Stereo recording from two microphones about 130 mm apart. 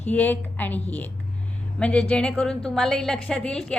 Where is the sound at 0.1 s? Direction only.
15° left (ahead or behind).